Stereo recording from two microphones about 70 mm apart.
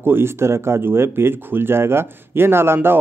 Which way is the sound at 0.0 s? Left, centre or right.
Right.